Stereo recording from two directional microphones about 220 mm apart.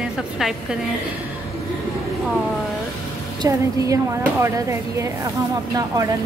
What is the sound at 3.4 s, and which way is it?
Speech, 15° right (ahead or behind).